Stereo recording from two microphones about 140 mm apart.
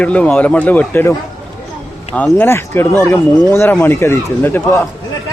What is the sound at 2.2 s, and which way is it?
Speech, 15° left (ahead or behind).